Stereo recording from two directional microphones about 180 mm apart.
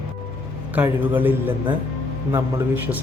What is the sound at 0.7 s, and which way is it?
Speech, 10° right (ahead or behind).